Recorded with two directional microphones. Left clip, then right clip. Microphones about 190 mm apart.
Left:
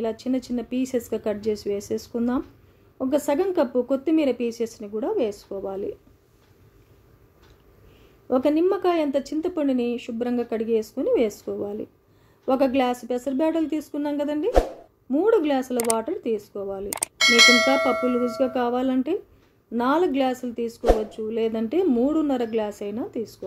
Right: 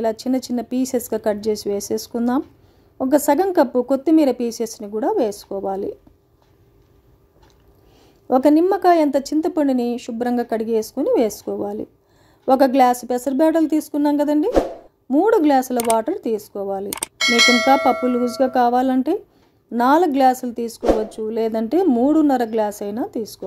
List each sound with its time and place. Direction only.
0.0 s speech: 45° right (ahead or behind)
8.3 s speech: 50° right (ahead or behind)
16.9 s speech: centre (ahead or behind)
18.2 s speech: 50° right (ahead or behind)